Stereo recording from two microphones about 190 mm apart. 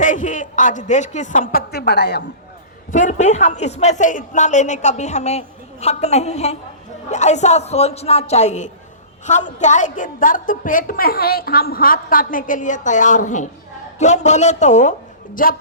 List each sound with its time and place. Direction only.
0.0 s a woman's voice: 40° left (ahead or behind); by 2.2 s 60° left (ahead or behind)
2.9 s a woman's voice: 40° left (ahead or behind)